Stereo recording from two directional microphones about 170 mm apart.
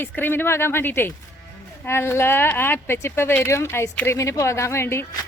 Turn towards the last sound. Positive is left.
turn(degrees=15)  # may be behind; listen again after turning